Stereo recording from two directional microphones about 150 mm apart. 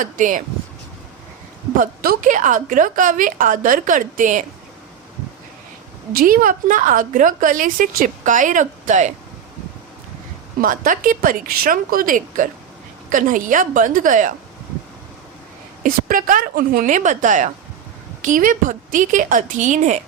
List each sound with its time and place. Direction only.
0.0 s a woman's voice: 60° right (ahead or behind)
1.8 s a woman's voice: 70° right (ahead or behind)
6.1 s a woman's voice: 70° right (ahead or behind); by 9.1 s 55° right (ahead or behind)
10.6 s a woman's voice: 65° right (ahead or behind)
15.8 s a woman's voice: 65° right (ahead or behind)